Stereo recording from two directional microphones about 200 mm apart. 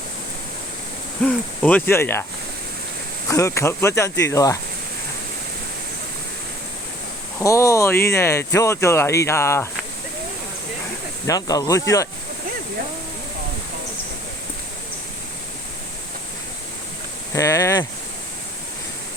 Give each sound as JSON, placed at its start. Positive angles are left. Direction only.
{"t": 1.2, "sound": "speech", "side_deg": 5}
{"t": 3.2, "sound": "speech", "side_deg": 15}
{"t": 7.3, "sound": "speech", "side_deg": 15}
{"t": 11.3, "sound": "speech", "side_deg": 20}
{"t": 17.3, "sound": "speech", "side_deg": 15}